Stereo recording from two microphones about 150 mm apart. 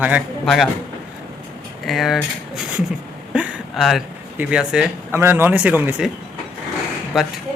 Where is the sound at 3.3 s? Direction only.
5° right (ahead or behind).